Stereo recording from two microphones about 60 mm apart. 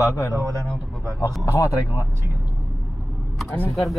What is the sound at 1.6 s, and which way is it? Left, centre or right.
Speech, left.